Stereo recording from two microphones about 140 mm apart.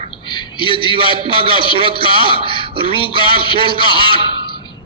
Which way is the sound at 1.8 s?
40° right (ahead or behind).